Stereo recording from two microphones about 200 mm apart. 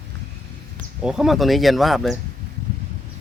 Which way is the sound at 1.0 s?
Centre (ahead or behind).